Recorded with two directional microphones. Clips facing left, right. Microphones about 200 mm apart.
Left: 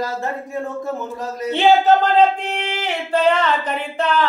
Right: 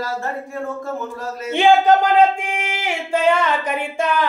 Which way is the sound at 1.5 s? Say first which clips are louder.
Even; 10° right (ahead or behind).